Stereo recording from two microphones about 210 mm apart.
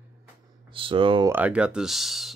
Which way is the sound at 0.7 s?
25° right (ahead or behind).